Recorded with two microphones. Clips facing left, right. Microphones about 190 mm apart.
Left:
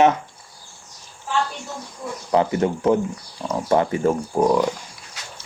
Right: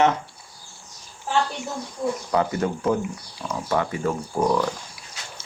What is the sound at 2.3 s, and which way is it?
A man's voice, 25° left (ahead or behind).